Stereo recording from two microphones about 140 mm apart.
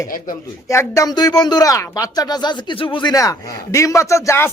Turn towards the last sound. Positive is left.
turn(degrees=20)  # may be behind; listen again after turning